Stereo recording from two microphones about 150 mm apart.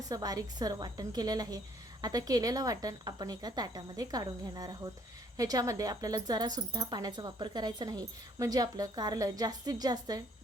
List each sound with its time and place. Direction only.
0.1 s speech: 25° right (ahead or behind)